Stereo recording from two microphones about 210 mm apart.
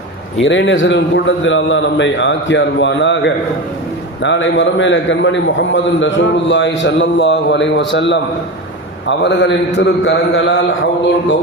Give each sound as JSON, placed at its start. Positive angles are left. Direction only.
{"t": 0.4, "sound": "a man's voice", "side_deg": 60}